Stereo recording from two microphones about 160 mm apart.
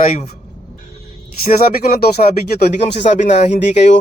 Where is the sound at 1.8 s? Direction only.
75° left (ahead or behind).